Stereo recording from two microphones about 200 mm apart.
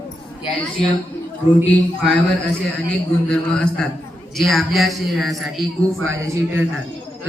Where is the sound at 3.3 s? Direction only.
5° left (ahead or behind).